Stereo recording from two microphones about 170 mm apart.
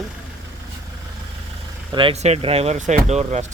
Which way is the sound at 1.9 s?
35° right (ahead or behind).